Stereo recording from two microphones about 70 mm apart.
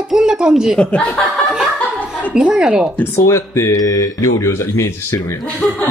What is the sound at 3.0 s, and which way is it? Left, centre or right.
Speech, left.